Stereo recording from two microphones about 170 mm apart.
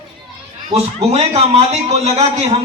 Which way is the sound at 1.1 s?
40° right (ahead or behind).